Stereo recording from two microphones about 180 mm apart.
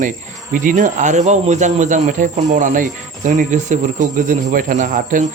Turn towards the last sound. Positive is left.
turn(degrees=-45)  # may be behind; listen again after turning